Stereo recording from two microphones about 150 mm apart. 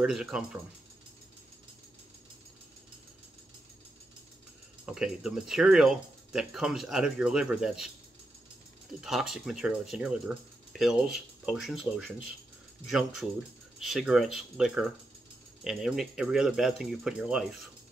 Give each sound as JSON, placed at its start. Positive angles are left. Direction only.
{"t": 0.0, "sound": "speech", "side_deg": -5}
{"t": 4.8, "sound": "speech", "side_deg": -5}
{"t": 9.0, "sound": "speech", "side_deg": -5}